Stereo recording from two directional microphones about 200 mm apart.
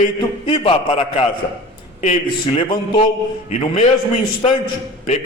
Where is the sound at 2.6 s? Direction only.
20° left (ahead or behind).